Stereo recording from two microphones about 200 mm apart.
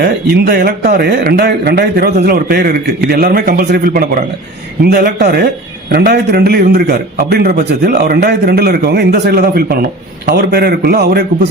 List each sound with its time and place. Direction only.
0.0 s a man's voice: 50° right (ahead or behind)